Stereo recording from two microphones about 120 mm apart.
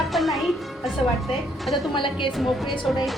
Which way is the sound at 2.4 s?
Centre (ahead or behind).